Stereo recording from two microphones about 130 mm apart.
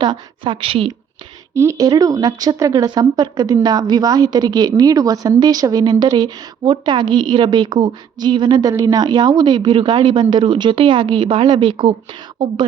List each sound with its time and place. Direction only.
0.0 s speech: 35° right (ahead or behind)
1.5 s speech: 25° right (ahead or behind)